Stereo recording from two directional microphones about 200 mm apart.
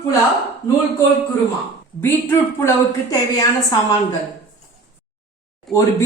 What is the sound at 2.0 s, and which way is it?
A woman's voice, 10° left (ahead or behind).